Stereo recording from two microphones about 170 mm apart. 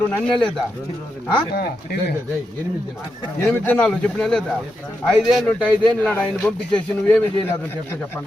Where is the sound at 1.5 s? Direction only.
65° left (ahead or behind).